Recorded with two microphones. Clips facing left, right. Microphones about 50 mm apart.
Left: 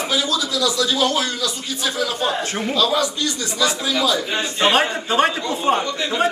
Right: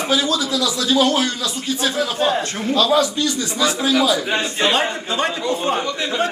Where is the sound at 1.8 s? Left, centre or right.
Right.